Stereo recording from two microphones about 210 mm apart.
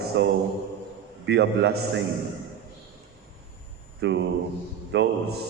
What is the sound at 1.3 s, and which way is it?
Speech, 50° right (ahead or behind).